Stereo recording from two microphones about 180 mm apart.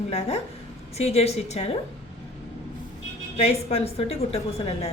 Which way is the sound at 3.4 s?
35° left (ahead or behind).